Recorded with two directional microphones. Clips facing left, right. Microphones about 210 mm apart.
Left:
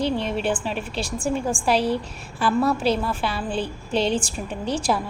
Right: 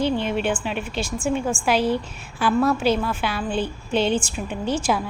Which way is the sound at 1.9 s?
Centre (ahead or behind).